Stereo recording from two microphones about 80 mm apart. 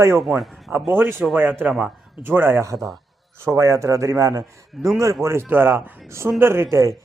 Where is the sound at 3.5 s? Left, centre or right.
Right.